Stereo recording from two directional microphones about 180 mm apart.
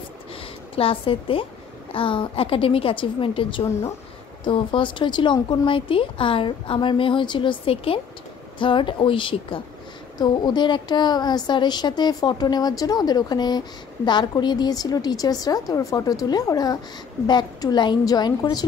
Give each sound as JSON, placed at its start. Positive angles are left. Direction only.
{"t": 0.7, "sound": "a woman's voice", "side_deg": 30}